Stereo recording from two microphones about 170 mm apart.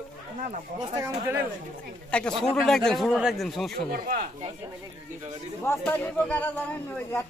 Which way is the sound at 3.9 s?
55° right (ahead or behind).